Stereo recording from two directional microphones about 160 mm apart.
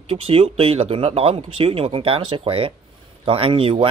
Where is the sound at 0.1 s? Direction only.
35° right (ahead or behind).